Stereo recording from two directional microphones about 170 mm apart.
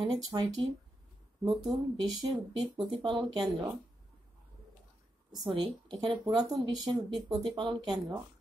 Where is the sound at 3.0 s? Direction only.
25° right (ahead or behind).